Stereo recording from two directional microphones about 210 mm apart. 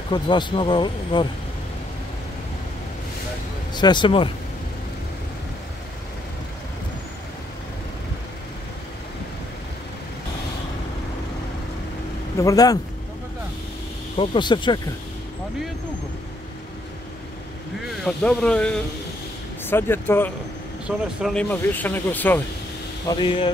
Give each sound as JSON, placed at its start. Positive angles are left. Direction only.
{"t": 0.1, "sound": "speech", "side_deg": 20}
{"t": 3.7, "sound": "speech", "side_deg": 20}
{"t": 12.4, "sound": "speech", "side_deg": 15}
{"t": 14.1, "sound": "speech", "side_deg": 25}
{"t": 18.0, "sound": "speech", "side_deg": 5}
{"t": 23.0, "sound": "speech", "side_deg": 20}